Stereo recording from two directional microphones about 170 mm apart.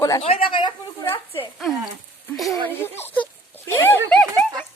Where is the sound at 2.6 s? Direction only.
15° left (ahead or behind).